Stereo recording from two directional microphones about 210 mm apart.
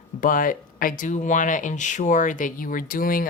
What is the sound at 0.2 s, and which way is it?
Speech, 40° left (ahead or behind).